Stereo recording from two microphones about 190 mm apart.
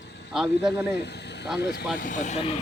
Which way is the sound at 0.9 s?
60° left (ahead or behind).